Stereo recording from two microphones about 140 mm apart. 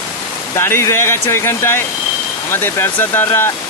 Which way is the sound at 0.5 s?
20° left (ahead or behind).